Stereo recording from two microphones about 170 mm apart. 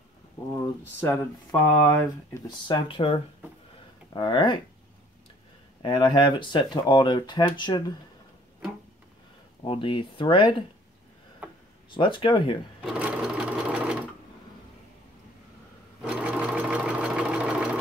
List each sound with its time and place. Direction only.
1.5 s speech: 15° left (ahead or behind)
2.7 s speech: 35° left (ahead or behind)
5.8 s speech: 25° left (ahead or behind)
9.7 s speech: 30° left (ahead or behind)
11.9 s speech: 30° left (ahead or behind)
12.8 s sewing machine: 5° right (ahead or behind)
16.0 s sewing machine: 5° right (ahead or behind)